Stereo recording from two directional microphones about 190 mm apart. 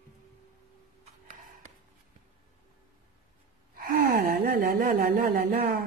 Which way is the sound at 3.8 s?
50° right (ahead or behind).